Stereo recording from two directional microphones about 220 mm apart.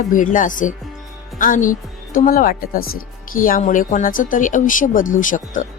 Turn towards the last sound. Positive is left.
turn(degrees=35)  # may be behind; listen again after turning